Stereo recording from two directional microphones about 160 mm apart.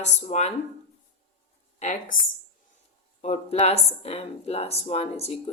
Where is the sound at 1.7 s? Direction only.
45° left (ahead or behind).